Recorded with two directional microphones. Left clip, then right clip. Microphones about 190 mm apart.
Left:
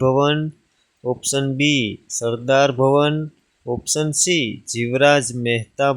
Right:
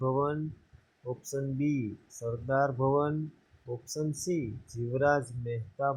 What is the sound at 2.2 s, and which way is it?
Speech, 40° left (ahead or behind).